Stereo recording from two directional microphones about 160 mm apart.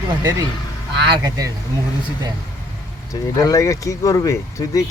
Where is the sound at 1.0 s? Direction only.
25° right (ahead or behind).